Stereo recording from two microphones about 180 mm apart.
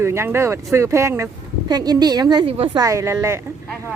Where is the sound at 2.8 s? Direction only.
15° right (ahead or behind).